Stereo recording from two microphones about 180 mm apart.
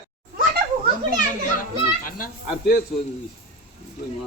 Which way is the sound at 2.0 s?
50° left (ahead or behind).